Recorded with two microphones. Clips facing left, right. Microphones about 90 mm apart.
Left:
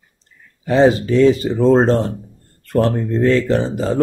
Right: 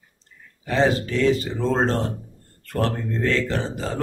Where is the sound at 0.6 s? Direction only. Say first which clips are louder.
Left 7 dB; 20° left (ahead or behind).